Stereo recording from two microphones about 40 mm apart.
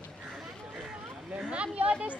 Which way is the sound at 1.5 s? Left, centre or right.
Right.